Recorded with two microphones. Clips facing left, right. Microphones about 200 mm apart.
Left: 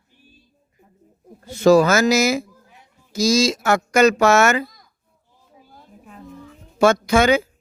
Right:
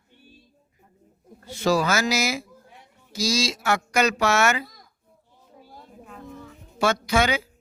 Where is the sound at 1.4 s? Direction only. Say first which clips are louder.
Left 9 dB; 45° left (ahead or behind).